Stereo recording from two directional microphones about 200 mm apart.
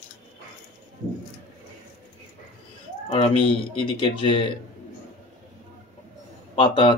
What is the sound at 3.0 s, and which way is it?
Speech, 25° left (ahead or behind).